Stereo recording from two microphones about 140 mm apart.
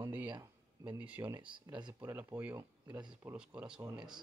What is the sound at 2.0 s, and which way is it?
Speech, 15° right (ahead or behind).